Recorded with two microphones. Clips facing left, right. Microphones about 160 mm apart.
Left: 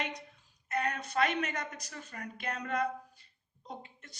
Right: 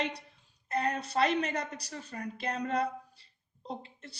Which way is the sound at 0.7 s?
30° right (ahead or behind).